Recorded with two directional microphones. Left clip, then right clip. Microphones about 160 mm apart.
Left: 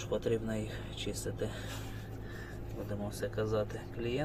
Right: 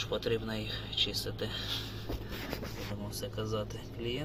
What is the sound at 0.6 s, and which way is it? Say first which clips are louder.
Speech: right 8 dB; centre (ahead or behind).